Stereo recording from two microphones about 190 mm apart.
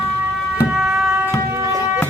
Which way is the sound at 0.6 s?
5° right (ahead or behind).